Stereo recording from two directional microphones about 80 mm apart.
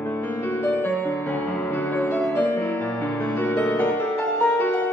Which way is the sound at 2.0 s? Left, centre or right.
Left.